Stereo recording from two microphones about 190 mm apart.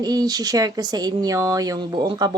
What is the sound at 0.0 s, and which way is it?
A woman's voice, 20° right (ahead or behind).